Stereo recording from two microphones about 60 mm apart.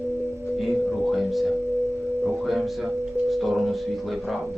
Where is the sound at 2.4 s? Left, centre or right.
Centre.